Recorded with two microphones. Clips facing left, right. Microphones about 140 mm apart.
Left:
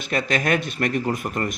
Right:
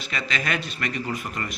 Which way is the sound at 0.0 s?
50° left (ahead or behind).